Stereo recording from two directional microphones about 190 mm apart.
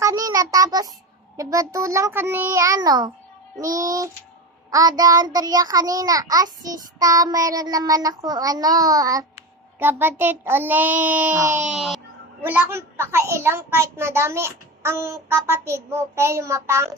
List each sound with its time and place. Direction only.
0.0 s a child's voice: 15° right (ahead or behind)
4.6 s child singing: 20° right (ahead or behind)
9.8 s a child's voice: 10° right (ahead or behind)